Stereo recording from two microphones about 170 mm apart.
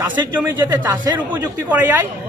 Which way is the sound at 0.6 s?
25° right (ahead or behind).